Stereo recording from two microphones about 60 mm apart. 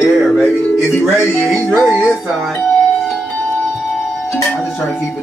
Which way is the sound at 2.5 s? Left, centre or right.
Centre.